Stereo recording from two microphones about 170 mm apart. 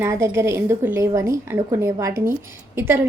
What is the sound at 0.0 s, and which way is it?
A woman's voice, 15° right (ahead or behind).